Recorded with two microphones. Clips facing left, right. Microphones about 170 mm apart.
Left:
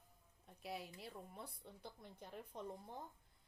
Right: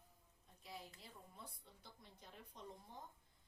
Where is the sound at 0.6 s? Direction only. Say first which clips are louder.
Left 7 dB; 70° left (ahead or behind).